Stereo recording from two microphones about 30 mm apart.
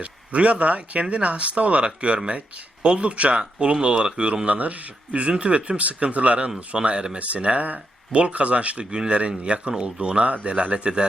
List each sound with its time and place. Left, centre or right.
0.0 s a man's voice: right
2.1 s speech: right
4.4 s a man's voice: right
6.7 s speech: right
7.2 s a man's voice: right
8.8 s speech: right